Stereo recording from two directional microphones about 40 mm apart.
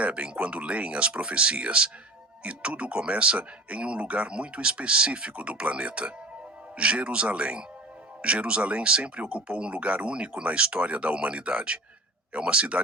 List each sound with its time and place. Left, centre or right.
0.0 s speech: right